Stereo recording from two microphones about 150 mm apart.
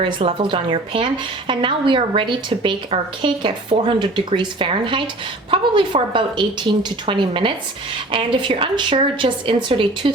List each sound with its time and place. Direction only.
0.0 s speech: 35° right (ahead or behind)